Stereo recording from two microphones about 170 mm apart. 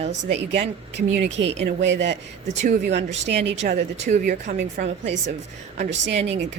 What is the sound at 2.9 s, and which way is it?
Speech, 90° right.